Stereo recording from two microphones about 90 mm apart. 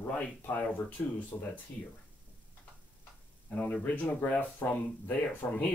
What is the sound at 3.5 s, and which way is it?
Speech, 15° left (ahead or behind).